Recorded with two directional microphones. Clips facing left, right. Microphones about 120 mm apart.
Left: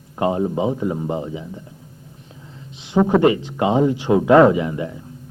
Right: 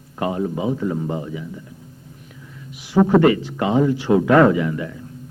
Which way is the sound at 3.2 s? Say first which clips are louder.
Even; 20° left (ahead or behind).